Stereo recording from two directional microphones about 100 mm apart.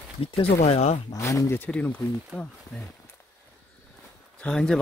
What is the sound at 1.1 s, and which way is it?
Speech, 30° left (ahead or behind).